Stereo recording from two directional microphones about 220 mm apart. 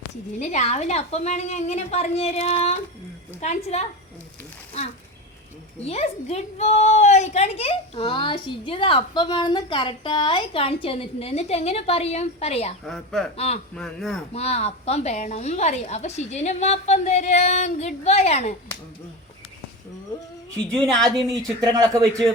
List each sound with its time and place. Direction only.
0.3 s a woman's voice: 30° left (ahead or behind)
5.8 s a woman's voice: 30° left (ahead or behind)
12.8 s a woman's voice: centre (ahead or behind)
13.3 s a woman's voice: 30° left (ahead or behind)
13.7 s a woman's voice: centre (ahead or behind)
14.3 s a woman's voice: 30° left (ahead or behind)
20.7 s a woman's voice: 5° left (ahead or behind)
21.0 s speech: 15° right (ahead or behind)